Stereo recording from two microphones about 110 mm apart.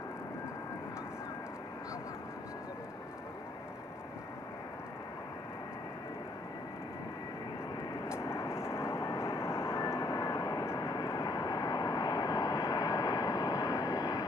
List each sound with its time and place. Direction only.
8.1 s vehicle: 25° left (ahead or behind)